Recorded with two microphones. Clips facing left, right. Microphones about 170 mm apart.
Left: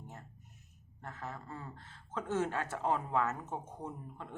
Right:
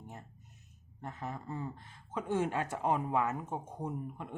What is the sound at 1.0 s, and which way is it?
Speech, 15° right (ahead or behind).